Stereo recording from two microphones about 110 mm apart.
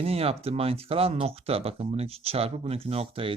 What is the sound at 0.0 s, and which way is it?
Speech, 60° right (ahead or behind).